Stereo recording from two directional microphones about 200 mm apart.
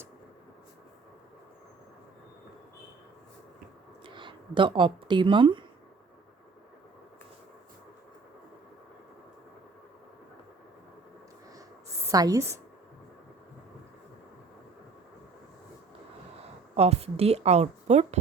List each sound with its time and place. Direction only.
4.0 s speech: 25° right (ahead or behind)
12.1 s a woman's voice: 20° right (ahead or behind)
16.7 s a woman's voice: 30° right (ahead or behind)